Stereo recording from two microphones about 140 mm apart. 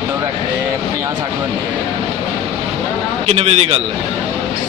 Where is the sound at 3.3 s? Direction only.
45° right (ahead or behind).